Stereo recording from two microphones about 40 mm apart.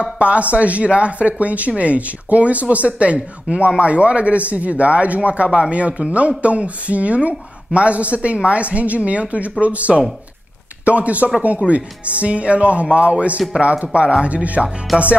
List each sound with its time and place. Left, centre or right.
0.0 s a woman's voice: right
14.9 s music: centre